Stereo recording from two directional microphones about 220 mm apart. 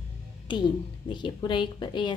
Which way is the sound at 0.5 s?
20° left (ahead or behind).